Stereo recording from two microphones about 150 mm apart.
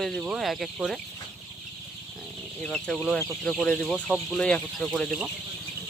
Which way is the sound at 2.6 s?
5° left (ahead or behind).